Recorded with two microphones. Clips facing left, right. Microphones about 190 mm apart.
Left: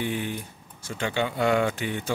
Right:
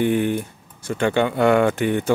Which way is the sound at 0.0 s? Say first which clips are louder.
Right 10 dB; 55° right (ahead or behind).